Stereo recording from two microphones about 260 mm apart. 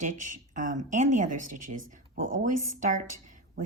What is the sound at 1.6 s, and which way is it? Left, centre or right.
Speech, right.